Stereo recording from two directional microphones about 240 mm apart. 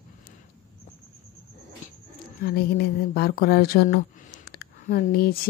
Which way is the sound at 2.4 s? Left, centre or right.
Left.